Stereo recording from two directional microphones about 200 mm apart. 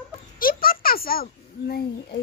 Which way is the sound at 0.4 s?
45° left (ahead or behind).